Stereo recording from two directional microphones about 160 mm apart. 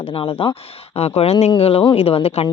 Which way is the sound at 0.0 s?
35° left (ahead or behind).